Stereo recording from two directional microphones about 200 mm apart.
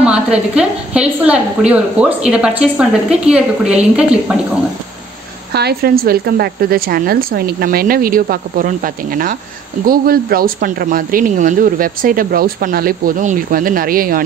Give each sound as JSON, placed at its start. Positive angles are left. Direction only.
{"t": 0.0, "sound": "a woman's voice", "side_deg": -5}
{"t": 5.5, "sound": "speech", "side_deg": -55}